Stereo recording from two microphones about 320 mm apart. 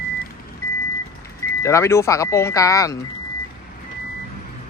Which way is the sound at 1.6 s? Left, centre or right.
Centre.